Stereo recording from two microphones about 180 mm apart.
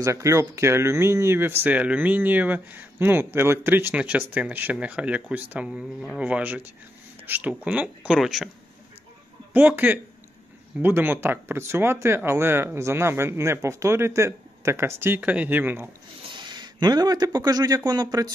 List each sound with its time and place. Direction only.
0.0 s speech: 15° right (ahead or behind)
9.5 s speech: 10° right (ahead or behind)
16.3 s a man's voice: 25° right (ahead or behind)